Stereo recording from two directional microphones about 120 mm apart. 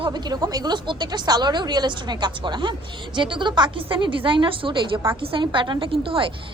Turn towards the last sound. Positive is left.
turn(degrees=-50)  # may be behind; listen again after turning